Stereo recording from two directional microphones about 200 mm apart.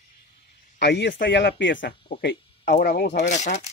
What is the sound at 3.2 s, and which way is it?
Speech, 35° left (ahead or behind).